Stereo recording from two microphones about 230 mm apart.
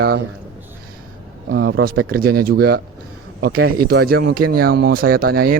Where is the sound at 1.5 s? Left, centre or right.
Right.